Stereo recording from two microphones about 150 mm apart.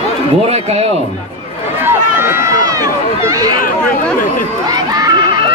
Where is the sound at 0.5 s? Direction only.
45° right (ahead or behind).